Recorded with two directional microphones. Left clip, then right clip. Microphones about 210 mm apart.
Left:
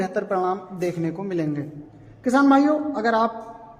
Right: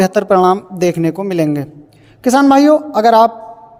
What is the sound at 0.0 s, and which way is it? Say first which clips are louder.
A man's voice: right 13 dB; 45° right (ahead or behind).